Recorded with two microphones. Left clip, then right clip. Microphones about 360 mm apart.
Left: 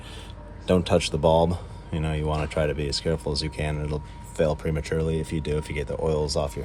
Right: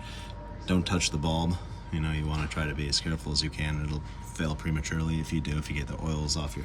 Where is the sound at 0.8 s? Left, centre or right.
Centre.